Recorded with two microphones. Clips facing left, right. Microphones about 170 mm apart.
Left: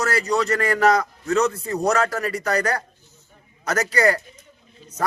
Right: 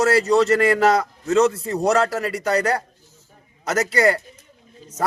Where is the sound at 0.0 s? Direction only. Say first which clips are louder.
Right 6 dB; 30° right (ahead or behind).